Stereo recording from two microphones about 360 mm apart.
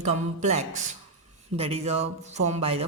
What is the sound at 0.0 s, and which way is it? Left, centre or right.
A woman's voice, centre.